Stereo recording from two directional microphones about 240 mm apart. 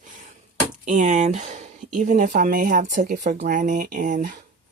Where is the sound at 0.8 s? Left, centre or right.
Right.